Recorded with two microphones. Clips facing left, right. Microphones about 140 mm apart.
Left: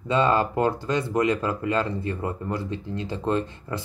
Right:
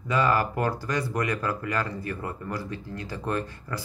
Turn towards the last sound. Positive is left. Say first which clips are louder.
# left 4 dB
turn(degrees=20)  # may be behind; listen again after turning